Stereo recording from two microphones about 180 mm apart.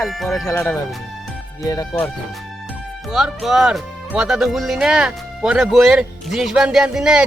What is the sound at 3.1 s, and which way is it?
Speech, centre (ahead or behind).